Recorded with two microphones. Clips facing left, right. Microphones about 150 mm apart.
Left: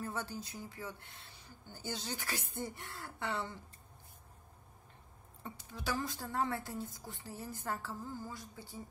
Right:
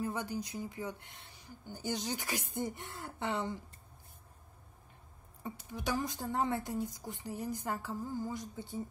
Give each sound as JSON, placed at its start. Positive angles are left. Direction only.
{"t": 0.0, "sound": "speech", "side_deg": -15}
{"t": 5.4, "sound": "speech", "side_deg": -15}